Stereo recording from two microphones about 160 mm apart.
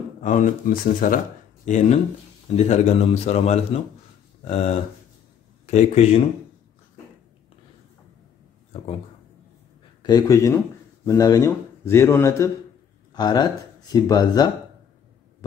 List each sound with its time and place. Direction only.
0.2 s speech: 50° left (ahead or behind)
2.5 s speech: 45° left (ahead or behind)
10.0 s speech: 25° left (ahead or behind)